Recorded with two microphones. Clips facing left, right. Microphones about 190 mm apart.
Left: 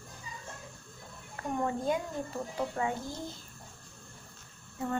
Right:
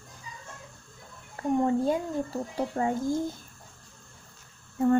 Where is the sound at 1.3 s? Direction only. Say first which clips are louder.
Right 8 dB; 30° right (ahead or behind).